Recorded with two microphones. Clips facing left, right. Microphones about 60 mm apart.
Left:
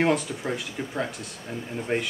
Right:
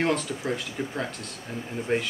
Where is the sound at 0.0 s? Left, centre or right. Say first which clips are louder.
Left 2 dB; centre.